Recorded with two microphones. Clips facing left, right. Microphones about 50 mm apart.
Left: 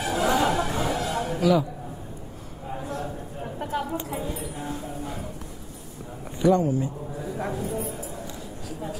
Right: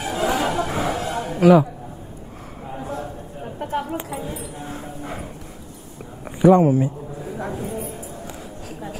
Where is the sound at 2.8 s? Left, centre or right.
Right.